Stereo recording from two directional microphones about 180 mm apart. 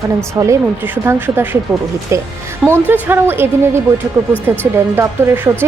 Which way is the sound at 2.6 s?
10° right (ahead or behind).